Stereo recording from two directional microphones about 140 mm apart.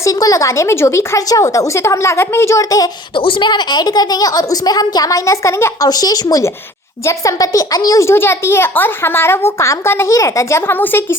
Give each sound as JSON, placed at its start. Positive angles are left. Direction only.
{"t": 0.0, "sound": "a child's voice", "side_deg": 25}
{"t": 3.2, "sound": "a child's voice", "side_deg": 40}